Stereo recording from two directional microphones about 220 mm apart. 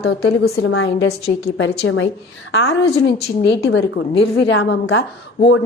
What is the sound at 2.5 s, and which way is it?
A woman's voice, 55° left (ahead or behind).